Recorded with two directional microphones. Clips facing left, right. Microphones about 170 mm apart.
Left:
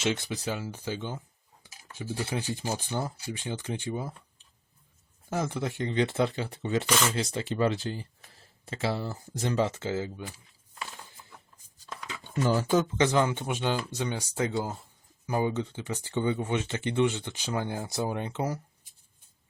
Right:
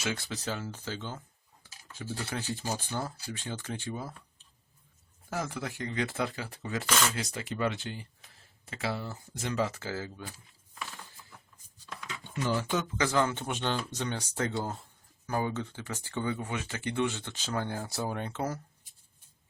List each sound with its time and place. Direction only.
0.0 s speech: 20° left (ahead or behind)
1.6 s stir: 15° left (ahead or behind)
2.0 s speech: 20° left (ahead or behind)
5.3 s speech: 25° left (ahead or behind)
12.3 s speech: 40° left (ahead or behind)
13.0 s speech: 20° left (ahead or behind)
15.3 s speech: 15° left (ahead or behind)